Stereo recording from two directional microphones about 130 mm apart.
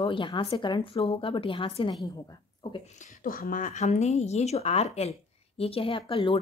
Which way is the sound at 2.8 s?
70° left (ahead or behind).